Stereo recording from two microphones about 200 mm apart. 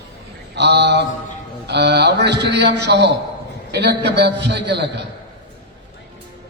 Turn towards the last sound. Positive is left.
turn(degrees=-60)  # may be behind; listen again after turning